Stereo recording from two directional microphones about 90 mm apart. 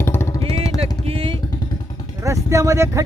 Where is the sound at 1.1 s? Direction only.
90° right.